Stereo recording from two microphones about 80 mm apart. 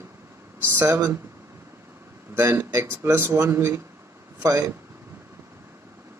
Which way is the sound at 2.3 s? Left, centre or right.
Right.